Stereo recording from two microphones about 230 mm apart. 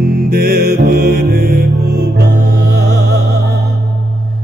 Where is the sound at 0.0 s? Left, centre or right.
Right.